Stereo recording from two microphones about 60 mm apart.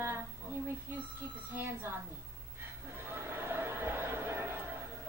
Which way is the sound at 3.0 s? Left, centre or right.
Right.